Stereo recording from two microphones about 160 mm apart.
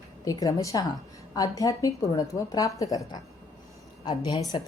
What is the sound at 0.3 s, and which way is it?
Speech, 20° left (ahead or behind).